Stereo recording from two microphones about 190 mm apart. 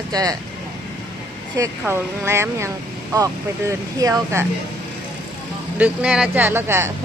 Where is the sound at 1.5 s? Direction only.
15° right (ahead or behind).